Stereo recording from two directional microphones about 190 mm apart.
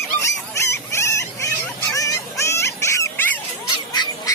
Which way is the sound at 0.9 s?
15° left (ahead or behind).